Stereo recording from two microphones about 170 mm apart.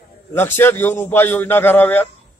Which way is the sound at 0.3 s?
15° left (ahead or behind).